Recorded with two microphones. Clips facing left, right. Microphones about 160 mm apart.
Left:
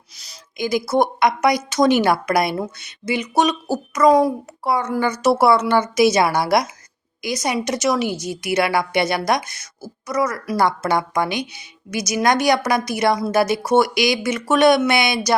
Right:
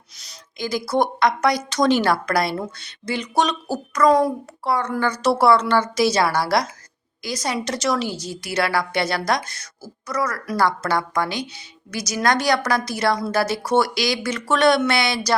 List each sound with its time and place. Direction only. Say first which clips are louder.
0.5 s a woman's voice: left 3 dB; 15° left (ahead or behind)